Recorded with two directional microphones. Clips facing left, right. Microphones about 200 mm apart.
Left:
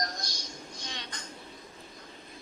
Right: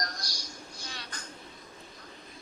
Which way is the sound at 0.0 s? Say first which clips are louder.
Left 3 dB; 25° left (ahead or behind).